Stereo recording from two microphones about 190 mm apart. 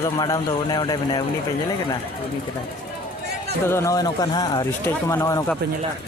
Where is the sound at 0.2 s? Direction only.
20° left (ahead or behind).